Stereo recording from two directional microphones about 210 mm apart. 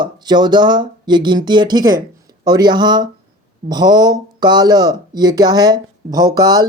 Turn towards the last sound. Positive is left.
turn(degrees=-20)  # may be behind; listen again after turning